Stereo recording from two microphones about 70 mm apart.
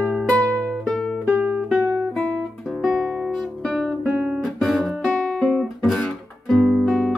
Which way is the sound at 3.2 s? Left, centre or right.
Centre.